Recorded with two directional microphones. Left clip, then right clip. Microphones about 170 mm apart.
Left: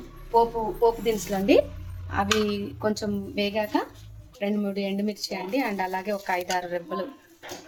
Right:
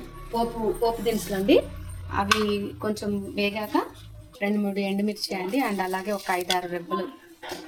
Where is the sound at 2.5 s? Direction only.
30° left (ahead or behind).